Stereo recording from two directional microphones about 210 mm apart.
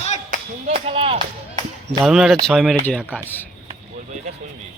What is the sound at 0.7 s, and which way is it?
Speech, 25° right (ahead or behind).